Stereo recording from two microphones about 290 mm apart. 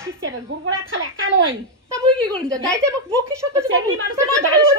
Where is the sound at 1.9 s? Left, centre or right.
Centre.